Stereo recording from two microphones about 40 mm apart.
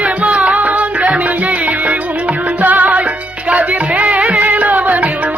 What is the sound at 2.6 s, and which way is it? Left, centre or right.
Music, right.